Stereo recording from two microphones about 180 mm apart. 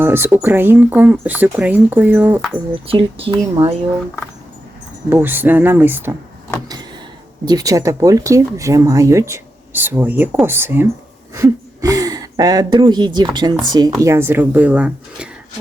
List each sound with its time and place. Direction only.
0.0 s speech: 15° right (ahead or behind)
2.8 s speech: 30° right (ahead or behind)
5.0 s speech: 10° right (ahead or behind)
7.4 s speech: 20° right (ahead or behind)